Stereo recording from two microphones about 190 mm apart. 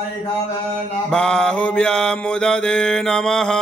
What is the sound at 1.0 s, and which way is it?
Mantra, 5° left (ahead or behind).